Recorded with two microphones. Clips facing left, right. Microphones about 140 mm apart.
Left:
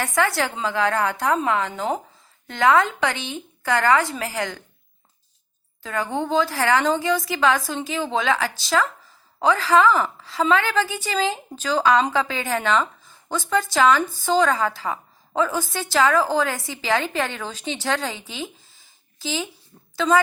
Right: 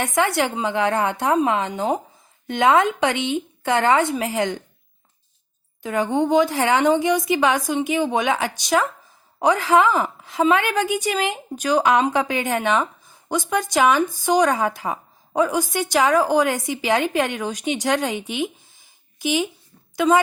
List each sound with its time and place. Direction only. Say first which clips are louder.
0.0 s a woman's voice: right 2 dB; 20° right (ahead or behind)
5.8 s a woman's voice: right 5 dB; 20° right (ahead or behind)